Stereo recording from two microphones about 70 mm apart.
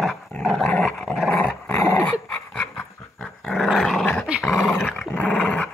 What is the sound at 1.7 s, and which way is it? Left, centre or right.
Dog, left.